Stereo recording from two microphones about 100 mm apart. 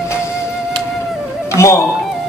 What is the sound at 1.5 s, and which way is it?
Music, 30° left (ahead or behind).